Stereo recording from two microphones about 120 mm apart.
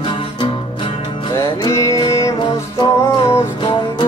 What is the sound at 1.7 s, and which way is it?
Music, 25° left (ahead or behind).